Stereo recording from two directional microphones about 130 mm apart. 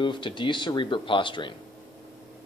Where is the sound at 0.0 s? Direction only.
40° left (ahead or behind).